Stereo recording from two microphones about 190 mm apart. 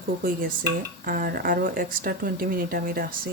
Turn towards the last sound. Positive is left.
turn(degrees=-50)  # may be behind; listen again after turning